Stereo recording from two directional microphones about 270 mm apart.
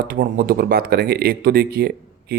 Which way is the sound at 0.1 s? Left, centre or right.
Right.